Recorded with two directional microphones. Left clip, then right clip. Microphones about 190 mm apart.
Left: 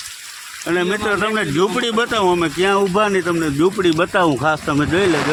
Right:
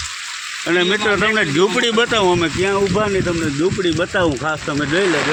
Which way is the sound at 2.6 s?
25° left (ahead or behind).